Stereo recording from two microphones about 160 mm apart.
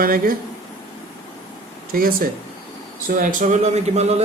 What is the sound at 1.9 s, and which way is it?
A man's voice, 65° right (ahead or behind).